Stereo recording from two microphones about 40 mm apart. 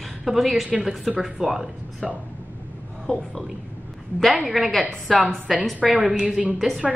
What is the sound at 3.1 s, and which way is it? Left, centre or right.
Speech, left.